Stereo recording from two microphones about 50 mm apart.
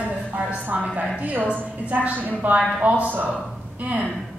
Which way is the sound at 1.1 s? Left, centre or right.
Right.